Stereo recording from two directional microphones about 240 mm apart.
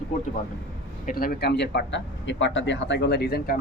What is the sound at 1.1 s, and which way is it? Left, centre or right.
Speech, left.